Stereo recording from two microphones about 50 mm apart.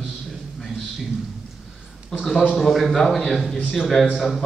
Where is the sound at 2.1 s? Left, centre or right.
Centre.